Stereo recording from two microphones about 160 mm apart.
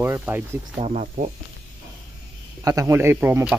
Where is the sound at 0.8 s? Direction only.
50° right (ahead or behind).